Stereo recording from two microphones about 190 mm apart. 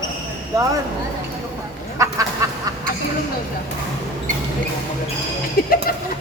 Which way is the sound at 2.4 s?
15° right (ahead or behind).